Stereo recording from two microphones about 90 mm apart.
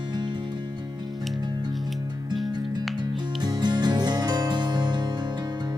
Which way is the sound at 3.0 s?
55° right (ahead or behind).